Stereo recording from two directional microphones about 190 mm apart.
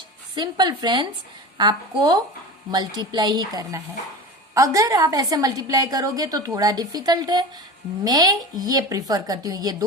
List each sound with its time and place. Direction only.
0.3 s a woman's voice: 20° right (ahead or behind)